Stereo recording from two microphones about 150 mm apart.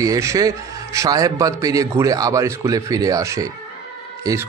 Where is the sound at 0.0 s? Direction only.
20° right (ahead or behind).